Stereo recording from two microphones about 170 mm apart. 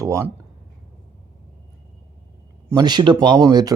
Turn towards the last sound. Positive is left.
turn(degrees=-20)  # may be behind; listen again after turning